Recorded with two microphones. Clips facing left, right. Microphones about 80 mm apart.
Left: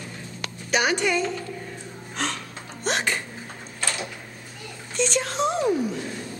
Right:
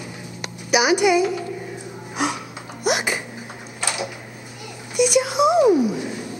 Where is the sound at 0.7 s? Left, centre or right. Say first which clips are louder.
Right 6 dB; centre.